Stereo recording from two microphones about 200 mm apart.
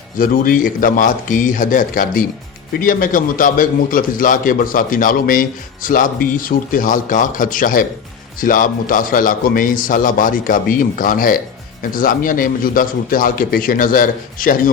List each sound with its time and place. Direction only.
0.2 s a man's voice: 45° left (ahead or behind)